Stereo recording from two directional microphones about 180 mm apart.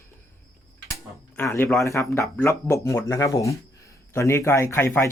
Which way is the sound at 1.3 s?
15° left (ahead or behind).